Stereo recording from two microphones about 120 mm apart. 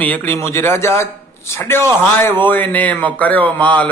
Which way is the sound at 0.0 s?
15° left (ahead or behind).